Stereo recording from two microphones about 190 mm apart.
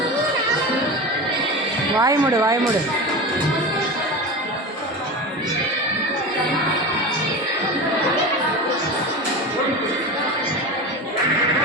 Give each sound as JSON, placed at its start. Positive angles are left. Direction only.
{"t": 2.0, "sound": "speech", "side_deg": -20}